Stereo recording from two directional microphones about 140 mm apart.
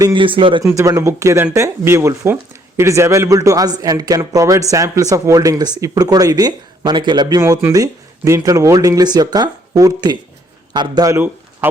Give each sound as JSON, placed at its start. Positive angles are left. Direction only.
{"t": 0.0, "sound": "speech", "side_deg": -35}
{"t": 0.6, "sound": "speech", "side_deg": -25}
{"t": 11.6, "sound": "speech", "side_deg": -15}